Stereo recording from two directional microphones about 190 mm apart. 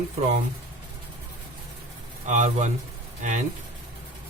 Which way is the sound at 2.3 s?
40° right (ahead or behind).